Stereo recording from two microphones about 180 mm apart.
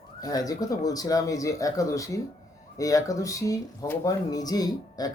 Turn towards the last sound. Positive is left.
turn(degrees=20)  # may be behind; listen again after turning